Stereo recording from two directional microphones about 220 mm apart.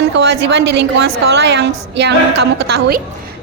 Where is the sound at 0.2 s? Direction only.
50° right (ahead or behind).